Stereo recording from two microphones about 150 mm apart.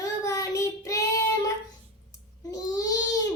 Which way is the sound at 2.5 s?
25° left (ahead or behind).